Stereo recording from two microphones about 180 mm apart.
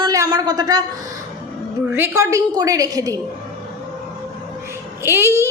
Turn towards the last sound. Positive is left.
turn(degrees=-15)  # may be behind; listen again after turning